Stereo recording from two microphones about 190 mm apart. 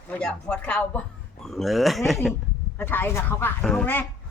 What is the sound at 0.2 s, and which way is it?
Speech, 5° left (ahead or behind).